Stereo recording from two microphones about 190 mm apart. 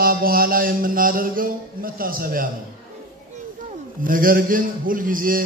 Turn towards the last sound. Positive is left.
turn(degrees=-45)  # may be behind; listen again after turning